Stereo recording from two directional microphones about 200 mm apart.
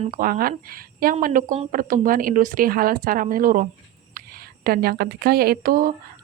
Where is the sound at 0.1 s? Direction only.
45° right (ahead or behind).